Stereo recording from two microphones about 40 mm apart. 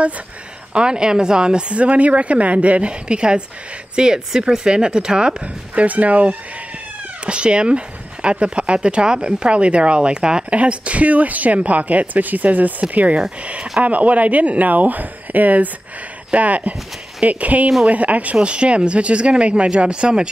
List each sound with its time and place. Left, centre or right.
0.7 s speech: right
1.8 s speech: right
5.4 s speech: right
7.2 s speech: right